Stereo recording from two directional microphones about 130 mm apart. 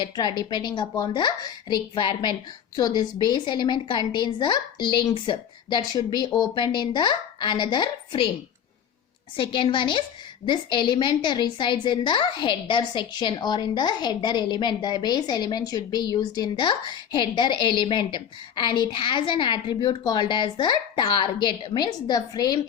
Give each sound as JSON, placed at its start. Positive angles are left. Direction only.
{"t": 0.0, "sound": "a woman's voice", "side_deg": 35}
{"t": 9.3, "sound": "a woman's voice", "side_deg": 40}